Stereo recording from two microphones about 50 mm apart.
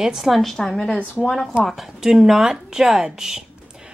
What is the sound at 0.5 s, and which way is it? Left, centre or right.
Speech, centre.